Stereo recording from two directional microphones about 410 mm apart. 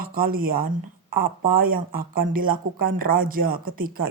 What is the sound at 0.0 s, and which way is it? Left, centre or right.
Speech, right.